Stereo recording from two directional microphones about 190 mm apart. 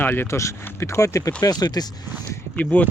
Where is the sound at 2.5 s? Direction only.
10° left (ahead or behind).